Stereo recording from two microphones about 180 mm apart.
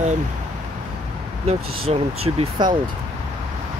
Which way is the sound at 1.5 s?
35° right (ahead or behind).